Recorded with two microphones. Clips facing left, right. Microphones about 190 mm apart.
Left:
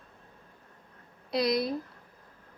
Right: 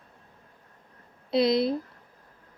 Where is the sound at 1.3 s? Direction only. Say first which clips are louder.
Right 5 dB; 25° right (ahead or behind).